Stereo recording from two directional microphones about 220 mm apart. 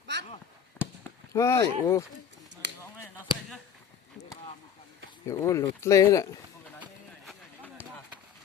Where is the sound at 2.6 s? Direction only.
55° right (ahead or behind).